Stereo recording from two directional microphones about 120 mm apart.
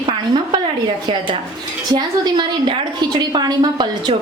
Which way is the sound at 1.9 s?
40° right (ahead or behind).